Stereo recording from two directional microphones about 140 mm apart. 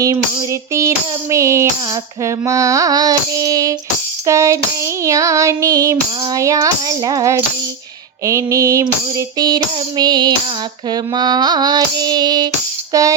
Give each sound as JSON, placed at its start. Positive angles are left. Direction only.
{"t": 0.7, "sound": "child singing", "side_deg": -20}
{"t": 12.9, "sound": "music", "side_deg": -25}